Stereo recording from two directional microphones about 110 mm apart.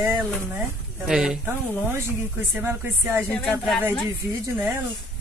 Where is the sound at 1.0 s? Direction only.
5° right (ahead or behind).